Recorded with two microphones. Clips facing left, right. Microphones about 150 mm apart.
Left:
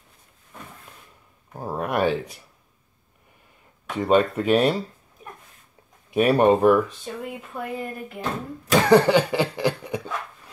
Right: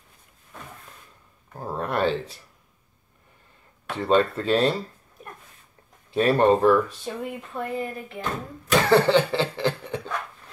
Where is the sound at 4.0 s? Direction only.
15° left (ahead or behind).